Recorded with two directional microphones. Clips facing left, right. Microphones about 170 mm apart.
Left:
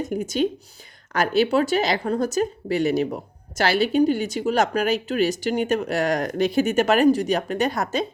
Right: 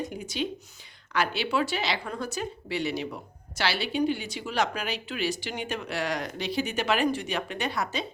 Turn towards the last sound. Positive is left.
turn(degrees=45)  # may be behind; listen again after turning